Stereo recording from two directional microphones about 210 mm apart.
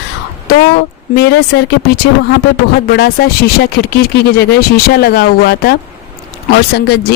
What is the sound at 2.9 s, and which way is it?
Speech, 50° left (ahead or behind).